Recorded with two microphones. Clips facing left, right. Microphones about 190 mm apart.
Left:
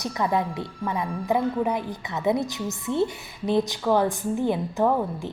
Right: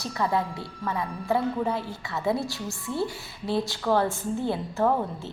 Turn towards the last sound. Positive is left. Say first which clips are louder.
# left 2 dB
turn(degrees=15)  # may be behind; listen again after turning